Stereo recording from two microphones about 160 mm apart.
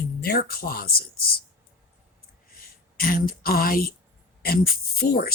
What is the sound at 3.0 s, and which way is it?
Speech, 65° left (ahead or behind).